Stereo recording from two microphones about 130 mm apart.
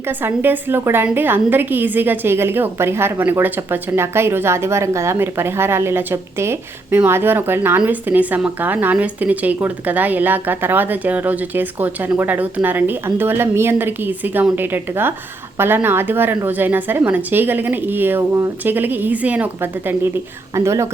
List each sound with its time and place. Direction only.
0.2 s a woman's voice: 15° right (ahead or behind)
20.6 s a woman's voice: 20° right (ahead or behind)